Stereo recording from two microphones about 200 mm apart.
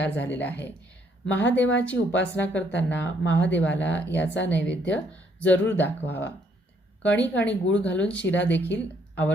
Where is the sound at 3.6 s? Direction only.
65° left (ahead or behind).